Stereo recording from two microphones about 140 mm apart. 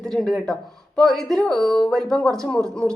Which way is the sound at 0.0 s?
Centre (ahead or behind).